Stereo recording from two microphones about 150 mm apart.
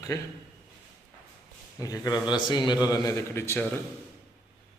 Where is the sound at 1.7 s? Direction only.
25° left (ahead or behind).